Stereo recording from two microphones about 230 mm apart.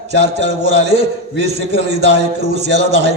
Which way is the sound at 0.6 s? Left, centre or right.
Right.